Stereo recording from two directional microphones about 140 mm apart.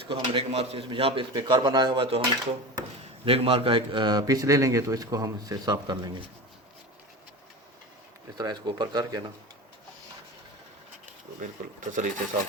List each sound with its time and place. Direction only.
0.1 s a man's voice: 40° right (ahead or behind)
1.3 s speech: 30° right (ahead or behind)
3.2 s a man's voice: 40° right (ahead or behind)
8.4 s speech: 30° right (ahead or behind)
11.9 s speech: 65° right (ahead or behind)